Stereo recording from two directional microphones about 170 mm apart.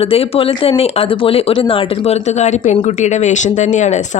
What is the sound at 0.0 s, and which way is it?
Speech, 35° left (ahead or behind).